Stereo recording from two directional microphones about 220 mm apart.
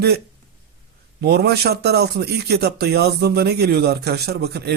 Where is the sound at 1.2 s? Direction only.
45° right (ahead or behind).